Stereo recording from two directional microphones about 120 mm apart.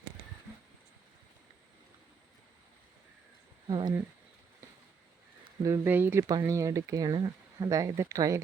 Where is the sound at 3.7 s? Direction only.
40° right (ahead or behind).